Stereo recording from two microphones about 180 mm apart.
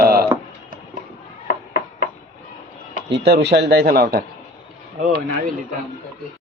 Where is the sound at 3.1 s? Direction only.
70° right (ahead or behind).